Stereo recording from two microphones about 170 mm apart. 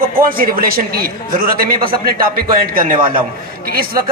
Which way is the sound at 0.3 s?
60° right (ahead or behind).